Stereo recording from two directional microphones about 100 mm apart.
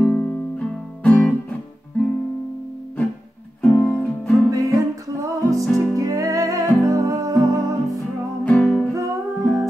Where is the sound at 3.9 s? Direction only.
5° left (ahead or behind).